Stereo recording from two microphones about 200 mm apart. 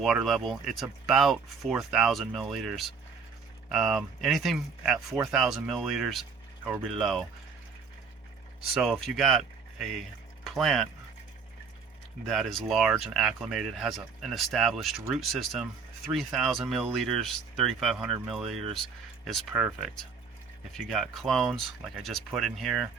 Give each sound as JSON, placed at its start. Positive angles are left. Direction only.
{"t": 0.0, "sound": "speech", "side_deg": 0}
{"t": 8.7, "sound": "speech", "side_deg": 0}
{"t": 12.3, "sound": "speech", "side_deg": 0}